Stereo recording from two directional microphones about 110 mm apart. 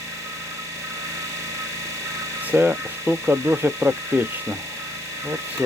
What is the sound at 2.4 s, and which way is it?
Speech, 20° right (ahead or behind).